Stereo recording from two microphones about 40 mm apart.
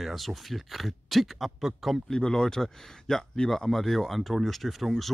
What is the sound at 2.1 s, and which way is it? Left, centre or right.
Speech, centre.